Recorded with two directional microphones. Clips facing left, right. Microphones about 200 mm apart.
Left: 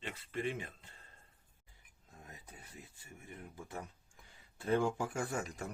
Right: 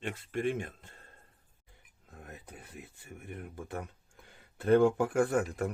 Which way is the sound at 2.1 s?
65° right (ahead or behind).